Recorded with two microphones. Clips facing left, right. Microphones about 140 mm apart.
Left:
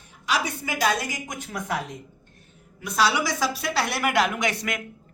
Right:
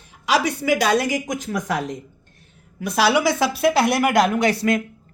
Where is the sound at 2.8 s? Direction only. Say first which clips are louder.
Right 5 dB; 70° right (ahead or behind).